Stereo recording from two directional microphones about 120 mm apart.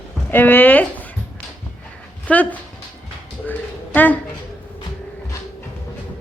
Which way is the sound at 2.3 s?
15° left (ahead or behind).